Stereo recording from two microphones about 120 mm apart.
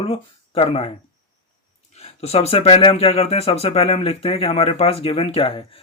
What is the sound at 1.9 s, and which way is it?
Speech, 60° left (ahead or behind).